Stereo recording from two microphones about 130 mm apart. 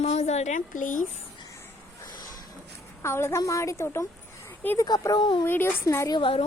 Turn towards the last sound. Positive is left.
turn(degrees=45)  # may be behind; listen again after turning